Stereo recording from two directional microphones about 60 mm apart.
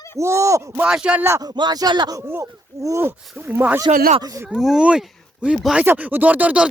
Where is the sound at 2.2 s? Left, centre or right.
Right.